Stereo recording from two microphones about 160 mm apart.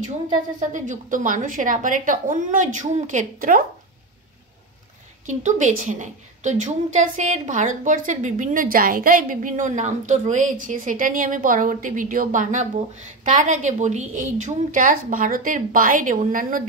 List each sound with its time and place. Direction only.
0.6 s a woman's voice: 50° right (ahead or behind)
5.2 s a woman's voice: 50° right (ahead or behind)